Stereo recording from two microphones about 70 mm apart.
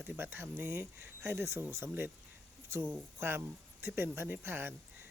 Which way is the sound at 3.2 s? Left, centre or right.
Right.